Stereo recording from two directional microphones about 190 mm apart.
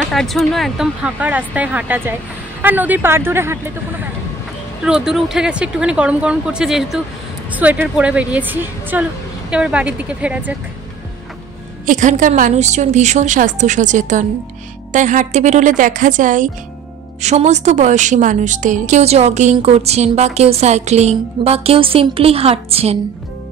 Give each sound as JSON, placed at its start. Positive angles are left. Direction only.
{"t": 0.0, "sound": "a woman's voice", "side_deg": 0}
{"t": 4.8, "sound": "a woman's voice", "side_deg": -5}
{"t": 11.8, "sound": "a woman's voice", "side_deg": -40}